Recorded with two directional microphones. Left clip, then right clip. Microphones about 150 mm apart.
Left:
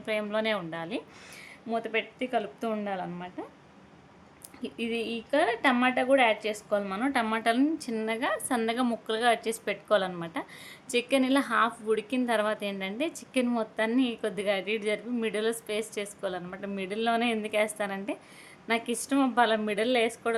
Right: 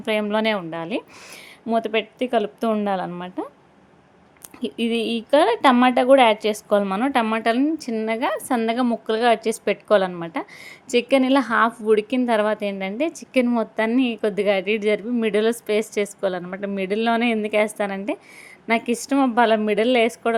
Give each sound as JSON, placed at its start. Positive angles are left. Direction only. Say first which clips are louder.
{"t": 0.0, "sound": "a woman's voice", "louder": "right 8 dB", "side_deg": -50}
{"t": 4.6, "sound": "a woman's voice", "louder": "right 9 dB", "side_deg": -50}